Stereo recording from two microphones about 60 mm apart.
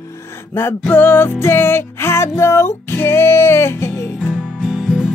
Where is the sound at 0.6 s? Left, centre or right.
Left.